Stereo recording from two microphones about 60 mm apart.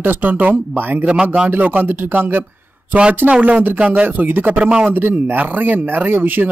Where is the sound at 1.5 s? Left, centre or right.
Right.